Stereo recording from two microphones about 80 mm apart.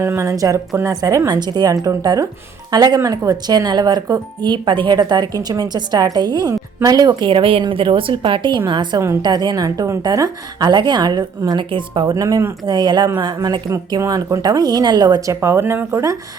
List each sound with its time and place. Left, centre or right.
0.0 s a woman's voice: right
1.4 s speech: right
2.7 s speech: right
6.8 s speech: right
7.2 s a woman's voice: right
9.2 s speech: right
11.7 s speech: right
12.1 s speech: right
12.6 s speech: right
14.1 s speech: right
15.3 s a woman's voice: right